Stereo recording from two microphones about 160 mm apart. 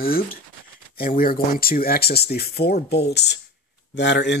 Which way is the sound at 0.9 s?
65° left (ahead or behind).